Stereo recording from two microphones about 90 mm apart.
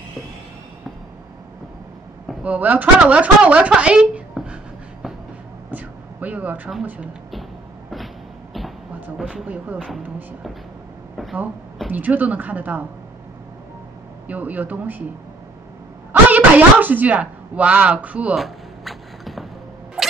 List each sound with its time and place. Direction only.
2.4 s speech: 15° right (ahead or behind)
5.7 s a sound: 20° right (ahead or behind)
9.0 s speech: 15° right (ahead or behind)
11.9 s speech: 20° right (ahead or behind)
14.2 s speech: 20° right (ahead or behind)
16.1 s speech: 20° right (ahead or behind)
18.3 s a sound: centre (ahead or behind)